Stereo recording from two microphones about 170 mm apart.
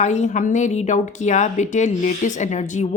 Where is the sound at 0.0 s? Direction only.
45° left (ahead or behind).